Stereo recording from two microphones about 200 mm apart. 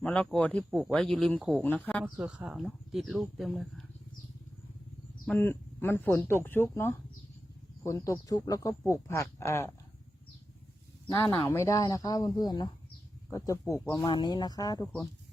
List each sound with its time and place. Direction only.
0.0 s speech: 5° left (ahead or behind)
2.0 s speech: 5° right (ahead or behind)
5.2 s speech: 10° left (ahead or behind)
11.1 s speech: 15° left (ahead or behind)